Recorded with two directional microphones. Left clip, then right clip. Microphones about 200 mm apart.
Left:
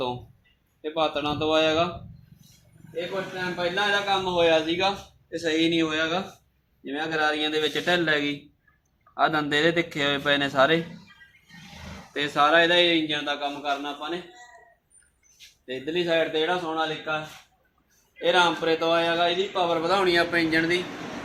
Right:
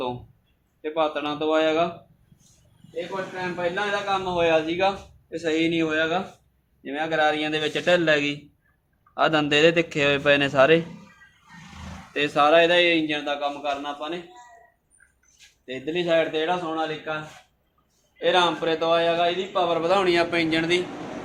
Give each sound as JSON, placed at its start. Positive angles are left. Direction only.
{"t": 0.8, "sound": "speech", "side_deg": 25}
{"t": 2.9, "sound": "a man's voice", "side_deg": -5}
{"t": 12.1, "sound": "a man's voice", "side_deg": -35}
{"t": 15.7, "sound": "a man's voice", "side_deg": -30}
{"t": 18.2, "sound": "a man's voice", "side_deg": -20}